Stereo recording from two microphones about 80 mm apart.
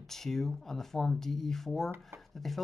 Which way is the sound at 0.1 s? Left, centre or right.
Centre.